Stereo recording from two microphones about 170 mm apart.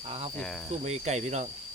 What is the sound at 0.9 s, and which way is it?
Speech, 40° right (ahead or behind).